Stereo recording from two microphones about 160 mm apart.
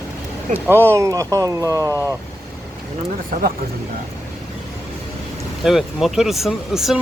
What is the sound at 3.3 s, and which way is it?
Speech, 60° right (ahead or behind).